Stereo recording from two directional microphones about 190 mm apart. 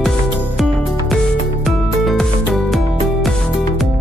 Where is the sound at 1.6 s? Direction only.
Centre (ahead or behind).